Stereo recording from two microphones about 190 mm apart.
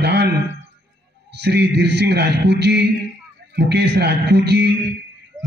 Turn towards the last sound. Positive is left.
turn(degrees=-60)  # may be behind; listen again after turning